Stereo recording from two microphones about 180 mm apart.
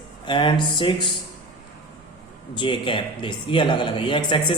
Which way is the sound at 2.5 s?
25° left (ahead or behind).